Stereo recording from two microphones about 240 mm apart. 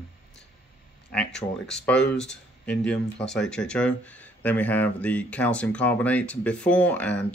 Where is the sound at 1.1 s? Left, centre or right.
Centre.